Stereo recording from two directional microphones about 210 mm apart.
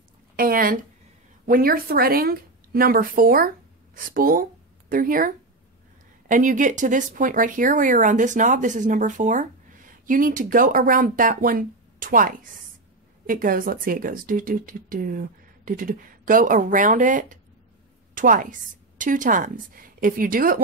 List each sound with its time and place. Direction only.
0.4 s a woman's voice: 45° right (ahead or behind)